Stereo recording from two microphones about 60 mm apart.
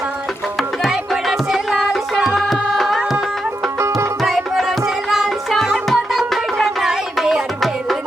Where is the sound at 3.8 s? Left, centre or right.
Right.